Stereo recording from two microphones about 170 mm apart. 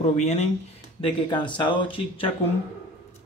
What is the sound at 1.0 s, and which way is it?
Speech, 30° left (ahead or behind).